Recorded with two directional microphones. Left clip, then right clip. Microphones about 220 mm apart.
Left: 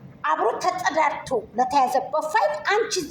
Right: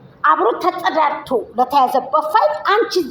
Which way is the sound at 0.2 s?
15° right (ahead or behind).